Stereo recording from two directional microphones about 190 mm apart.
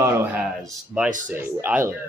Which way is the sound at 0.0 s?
10° right (ahead or behind).